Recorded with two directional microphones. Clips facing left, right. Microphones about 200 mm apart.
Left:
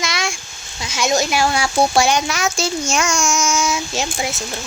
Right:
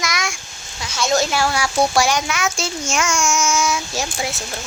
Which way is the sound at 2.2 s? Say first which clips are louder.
Left 2 dB; 40° left (ahead or behind).